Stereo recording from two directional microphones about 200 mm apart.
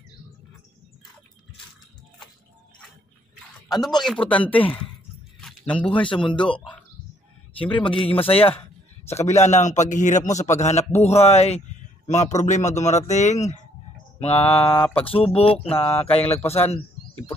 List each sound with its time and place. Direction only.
4.0 s speech: 5° left (ahead or behind)
5.4 s a sound: 5° left (ahead or behind)
6.0 s speech: 25° left (ahead or behind)
7.5 s a man's voice: 25° left (ahead or behind)